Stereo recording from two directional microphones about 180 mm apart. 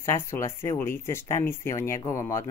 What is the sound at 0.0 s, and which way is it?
Speech, 15° left (ahead or behind).